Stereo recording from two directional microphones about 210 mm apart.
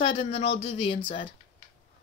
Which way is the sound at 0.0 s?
25° left (ahead or behind).